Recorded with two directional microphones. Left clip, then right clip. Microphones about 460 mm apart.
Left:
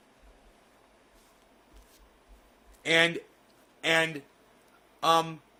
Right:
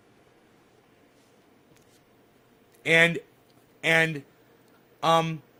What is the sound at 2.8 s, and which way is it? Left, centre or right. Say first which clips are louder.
Speech: right 4 dB; centre.